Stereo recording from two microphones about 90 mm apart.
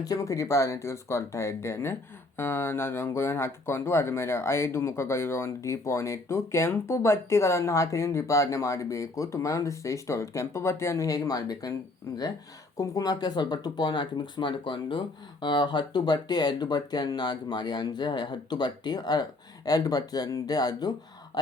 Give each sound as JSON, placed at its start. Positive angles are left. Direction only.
{"t": 0.0, "sound": "speech", "side_deg": 40}
{"t": 12.7, "sound": "speech", "side_deg": 40}